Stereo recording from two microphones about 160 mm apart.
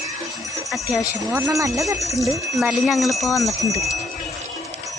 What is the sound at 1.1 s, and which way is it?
Speech, 15° right (ahead or behind).